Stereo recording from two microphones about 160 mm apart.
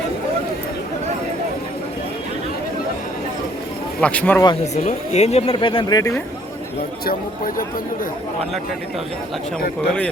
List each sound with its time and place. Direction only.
4.0 s speech: 10° left (ahead or behind)
4.6 s speech: 45° left (ahead or behind)
5.5 s speech: 30° left (ahead or behind)
6.0 s speech: 20° left (ahead or behind)
7.0 s speech: 60° left (ahead or behind)